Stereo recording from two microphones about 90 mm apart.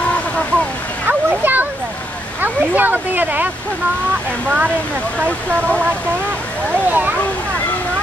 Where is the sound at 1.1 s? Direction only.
20° right (ahead or behind).